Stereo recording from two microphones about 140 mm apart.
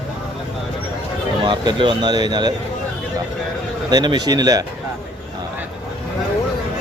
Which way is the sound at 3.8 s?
30° right (ahead or behind).